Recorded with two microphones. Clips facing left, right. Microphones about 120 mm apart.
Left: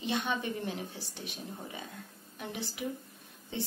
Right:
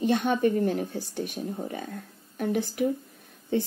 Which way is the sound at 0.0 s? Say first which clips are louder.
Right 10 dB; 50° right (ahead or behind).